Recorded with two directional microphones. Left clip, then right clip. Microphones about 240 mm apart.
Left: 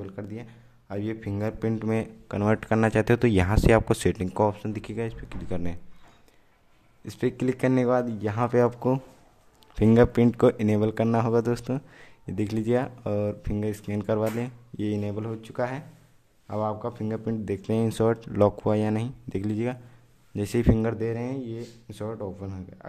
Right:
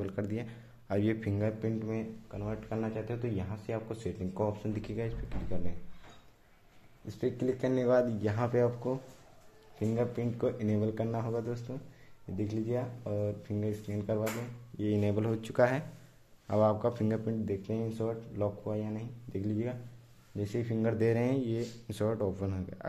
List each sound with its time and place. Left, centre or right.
0.0 s speech: centre
1.6 s speech: left
7.1 s speech: left
9.8 s speech: left
15.0 s speech: centre
17.3 s speech: left
21.0 s speech: centre